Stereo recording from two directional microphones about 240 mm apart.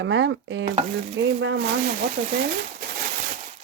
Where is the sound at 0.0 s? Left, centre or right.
Right.